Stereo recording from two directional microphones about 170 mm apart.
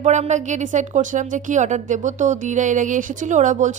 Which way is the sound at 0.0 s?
45° right (ahead or behind).